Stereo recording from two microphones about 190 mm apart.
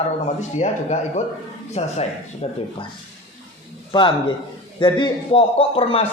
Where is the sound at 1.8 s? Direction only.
30° left (ahead or behind).